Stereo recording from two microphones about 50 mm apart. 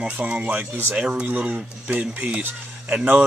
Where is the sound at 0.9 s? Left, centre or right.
Centre.